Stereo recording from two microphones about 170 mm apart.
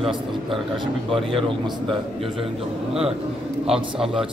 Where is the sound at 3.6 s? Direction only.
5° right (ahead or behind).